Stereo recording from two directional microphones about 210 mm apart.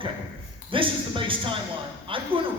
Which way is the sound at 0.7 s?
25° right (ahead or behind).